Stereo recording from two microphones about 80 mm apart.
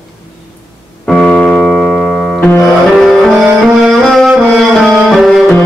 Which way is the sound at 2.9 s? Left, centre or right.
Centre.